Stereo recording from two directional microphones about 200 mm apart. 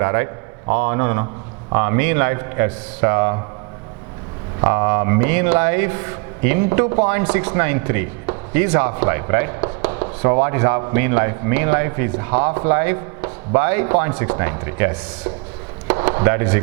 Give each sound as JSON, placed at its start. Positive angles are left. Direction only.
{"t": 0.0, "sound": "a man's voice", "side_deg": -15}
{"t": 4.6, "sound": "a man's voice", "side_deg": -15}